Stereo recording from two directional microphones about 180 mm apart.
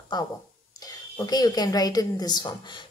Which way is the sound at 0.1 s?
25° left (ahead or behind).